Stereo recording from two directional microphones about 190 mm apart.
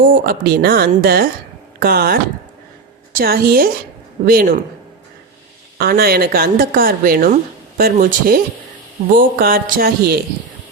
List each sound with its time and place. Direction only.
0.0 s a woman's voice: 50° right (ahead or behind)
5.7 s a woman's voice: 50° right (ahead or behind)